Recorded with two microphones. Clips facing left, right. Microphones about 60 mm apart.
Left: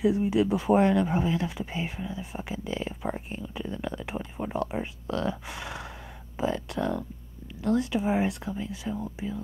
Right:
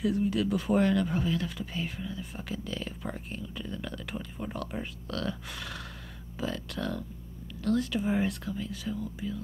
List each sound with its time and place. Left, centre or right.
0.0 s speech: centre